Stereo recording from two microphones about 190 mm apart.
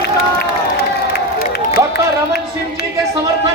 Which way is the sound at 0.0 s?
60° left (ahead or behind).